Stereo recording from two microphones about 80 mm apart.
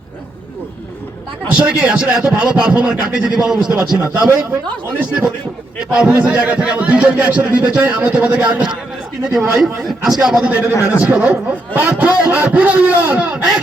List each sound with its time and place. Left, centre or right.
1.5 s a man's voice: centre
5.9 s a man's voice: centre